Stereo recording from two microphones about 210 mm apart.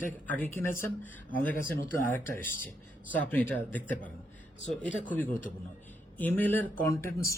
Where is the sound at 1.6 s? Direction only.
40° left (ahead or behind).